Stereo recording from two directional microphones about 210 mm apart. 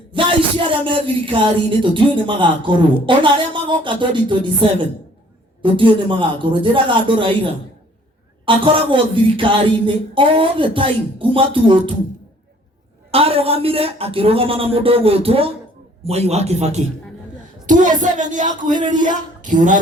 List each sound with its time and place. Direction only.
0.1 s speech: 25° right (ahead or behind)
13.1 s speech: 30° right (ahead or behind)